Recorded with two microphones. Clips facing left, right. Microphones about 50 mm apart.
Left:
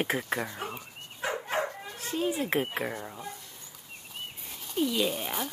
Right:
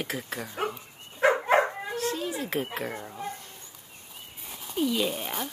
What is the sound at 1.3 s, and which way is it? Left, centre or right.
Dog, right.